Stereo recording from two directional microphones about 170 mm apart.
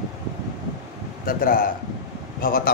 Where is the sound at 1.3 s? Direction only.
55° left (ahead or behind).